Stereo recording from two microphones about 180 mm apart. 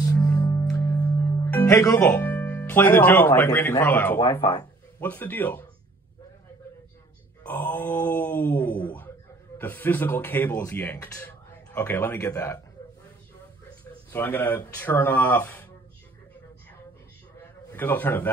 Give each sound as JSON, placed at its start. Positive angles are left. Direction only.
{"t": 0.0, "sound": "music", "side_deg": 15}
{"t": 2.0, "sound": "speech", "side_deg": 10}
{"t": 4.4, "sound": "speech", "side_deg": 25}
{"t": 5.0, "sound": "speech", "side_deg": 10}
{"t": 7.4, "sound": "a sound", "side_deg": 10}
{"t": 9.6, "sound": "speech", "side_deg": 10}
{"t": 14.1, "sound": "speech", "side_deg": 10}
{"t": 17.7, "sound": "speech", "side_deg": 10}